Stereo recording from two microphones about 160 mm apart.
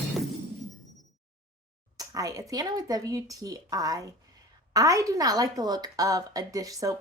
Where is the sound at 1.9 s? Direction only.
20° right (ahead or behind).